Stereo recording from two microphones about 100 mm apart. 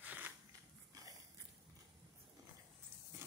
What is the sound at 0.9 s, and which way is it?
Dog, 35° right (ahead or behind).